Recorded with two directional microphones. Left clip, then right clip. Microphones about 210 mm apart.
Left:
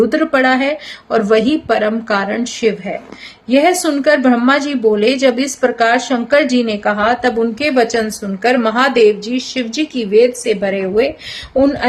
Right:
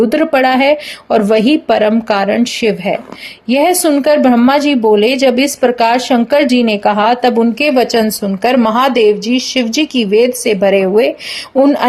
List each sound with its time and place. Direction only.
0.1 s a woman's voice: 30° right (ahead or behind)